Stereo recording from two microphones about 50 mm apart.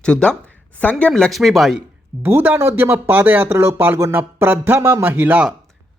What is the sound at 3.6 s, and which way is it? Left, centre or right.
Speech, right.